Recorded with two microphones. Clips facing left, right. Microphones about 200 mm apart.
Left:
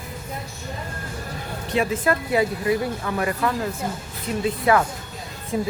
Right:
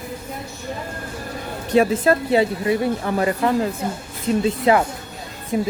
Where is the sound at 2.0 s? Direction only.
25° right (ahead or behind).